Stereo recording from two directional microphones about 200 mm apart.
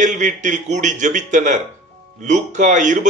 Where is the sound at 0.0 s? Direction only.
40° right (ahead or behind).